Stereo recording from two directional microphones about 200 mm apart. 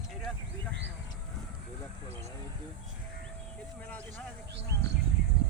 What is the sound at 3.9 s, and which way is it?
Speech, 10° left (ahead or behind).